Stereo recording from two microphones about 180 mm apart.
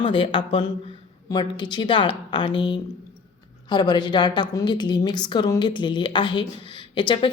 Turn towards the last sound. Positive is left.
turn(degrees=25)  # may be behind; listen again after turning